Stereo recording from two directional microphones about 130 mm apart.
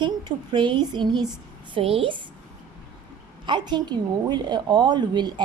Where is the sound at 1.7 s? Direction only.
45° right (ahead or behind).